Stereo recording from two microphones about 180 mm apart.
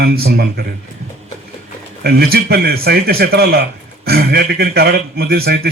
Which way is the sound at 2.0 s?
60° right (ahead or behind).